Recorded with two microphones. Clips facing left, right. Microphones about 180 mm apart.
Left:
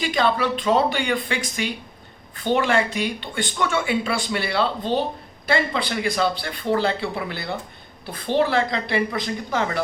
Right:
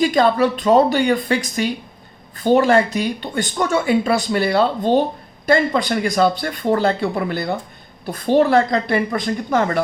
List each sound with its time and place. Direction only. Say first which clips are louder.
0.0 s speech: right 6 dB; 40° right (ahead or behind)